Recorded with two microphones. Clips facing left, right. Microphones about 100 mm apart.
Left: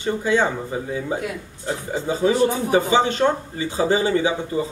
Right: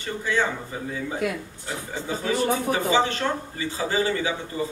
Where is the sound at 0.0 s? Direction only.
20° left (ahead or behind).